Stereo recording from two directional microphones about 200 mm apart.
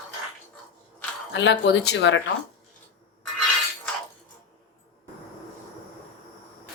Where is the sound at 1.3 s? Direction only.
65° left (ahead or behind).